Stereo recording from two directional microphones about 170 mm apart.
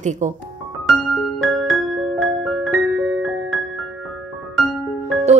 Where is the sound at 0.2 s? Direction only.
45° right (ahead or behind).